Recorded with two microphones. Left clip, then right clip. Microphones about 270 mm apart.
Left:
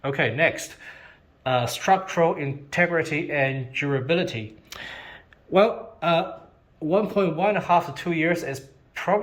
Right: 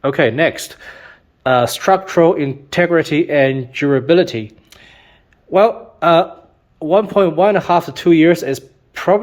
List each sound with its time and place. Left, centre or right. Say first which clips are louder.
0.0 s speech: right 8 dB; centre
4.7 s a sound: left 6 dB; centre
5.5 s a man's voice: right 7 dB; centre